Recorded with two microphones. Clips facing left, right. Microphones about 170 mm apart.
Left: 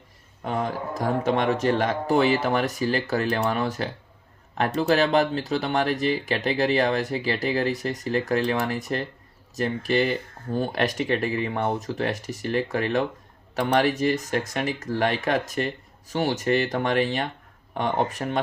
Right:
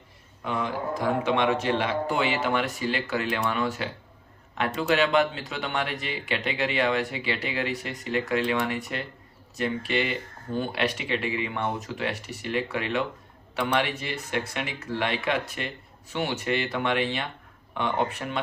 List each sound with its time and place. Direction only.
0.4 s speech: 45° left (ahead or behind)